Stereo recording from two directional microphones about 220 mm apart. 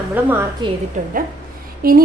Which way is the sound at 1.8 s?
40° right (ahead or behind).